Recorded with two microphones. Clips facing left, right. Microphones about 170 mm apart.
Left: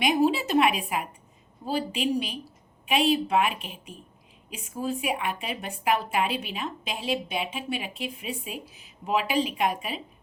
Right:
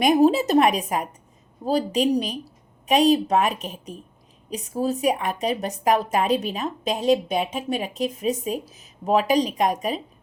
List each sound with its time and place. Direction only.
0.0 s speech: 45° right (ahead or behind)